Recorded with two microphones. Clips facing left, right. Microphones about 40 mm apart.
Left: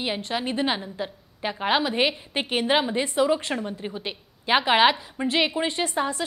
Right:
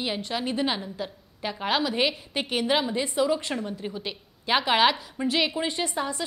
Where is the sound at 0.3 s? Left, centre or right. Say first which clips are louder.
Left 2 dB; centre.